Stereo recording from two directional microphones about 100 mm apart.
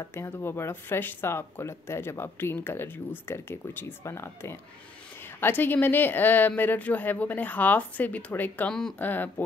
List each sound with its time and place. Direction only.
0.0 s speech: 25° left (ahead or behind)